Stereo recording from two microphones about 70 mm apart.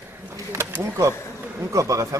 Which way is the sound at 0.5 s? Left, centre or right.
Right.